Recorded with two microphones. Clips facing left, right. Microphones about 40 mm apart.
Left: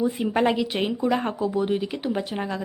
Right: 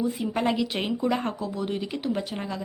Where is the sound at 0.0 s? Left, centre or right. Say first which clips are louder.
Left 4 dB; left.